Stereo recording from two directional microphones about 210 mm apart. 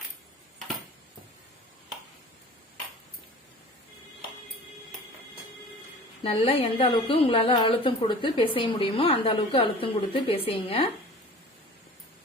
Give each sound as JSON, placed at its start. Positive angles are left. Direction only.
{"t": 6.2, "sound": "a woman's voice", "side_deg": 25}